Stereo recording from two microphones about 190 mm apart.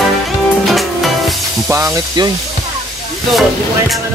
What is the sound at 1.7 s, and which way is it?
Speech, 15° right (ahead or behind).